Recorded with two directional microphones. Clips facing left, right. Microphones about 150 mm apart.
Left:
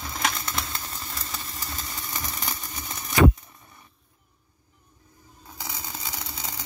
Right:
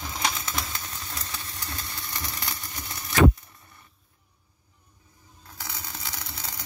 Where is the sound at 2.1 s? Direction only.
15° left (ahead or behind).